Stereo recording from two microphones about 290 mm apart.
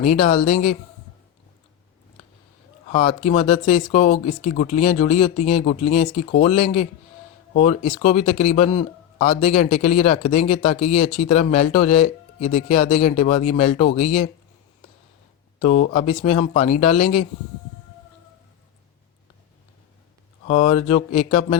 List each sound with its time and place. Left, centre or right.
0.0 s speech: left
2.9 s speech: left
15.6 s speech: left
20.4 s speech: left